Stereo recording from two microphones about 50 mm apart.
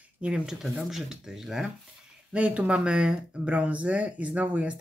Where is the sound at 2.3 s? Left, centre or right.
Right.